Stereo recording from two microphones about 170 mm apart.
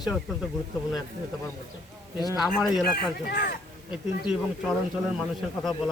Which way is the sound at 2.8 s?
60° left (ahead or behind).